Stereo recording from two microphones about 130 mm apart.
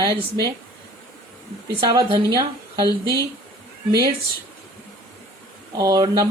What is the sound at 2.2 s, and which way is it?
Speech, 30° right (ahead or behind).